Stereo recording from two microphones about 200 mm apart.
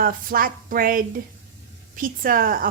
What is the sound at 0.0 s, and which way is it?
A woman's voice, 45° right (ahead or behind).